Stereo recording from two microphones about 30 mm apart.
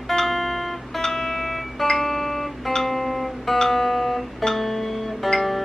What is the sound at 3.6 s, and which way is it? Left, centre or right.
Music, centre.